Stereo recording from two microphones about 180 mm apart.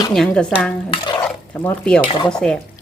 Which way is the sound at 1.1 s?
10° left (ahead or behind).